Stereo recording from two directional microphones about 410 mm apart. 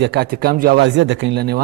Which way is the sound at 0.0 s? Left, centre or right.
Right.